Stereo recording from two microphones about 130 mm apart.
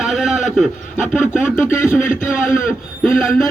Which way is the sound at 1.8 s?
80° left.